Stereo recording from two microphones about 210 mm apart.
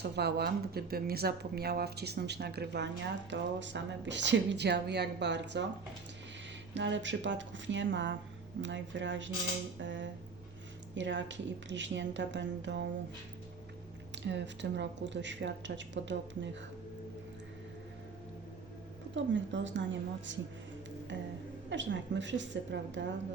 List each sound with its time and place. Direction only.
0.0 s speech: 50° right (ahead or behind)
6.7 s speech: 60° right (ahead or behind)
14.2 s speech: 60° right (ahead or behind)
19.1 s speech: 60° right (ahead or behind)
21.7 s speech: 60° right (ahead or behind)